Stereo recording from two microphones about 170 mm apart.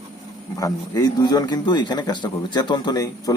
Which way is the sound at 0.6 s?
20° left (ahead or behind).